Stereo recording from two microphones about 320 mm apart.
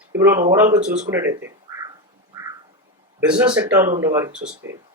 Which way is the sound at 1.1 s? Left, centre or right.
Centre.